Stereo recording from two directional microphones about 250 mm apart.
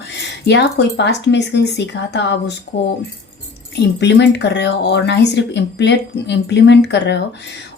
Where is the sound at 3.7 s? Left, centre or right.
Left.